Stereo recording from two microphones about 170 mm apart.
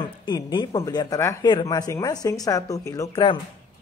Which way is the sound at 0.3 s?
25° left (ahead or behind).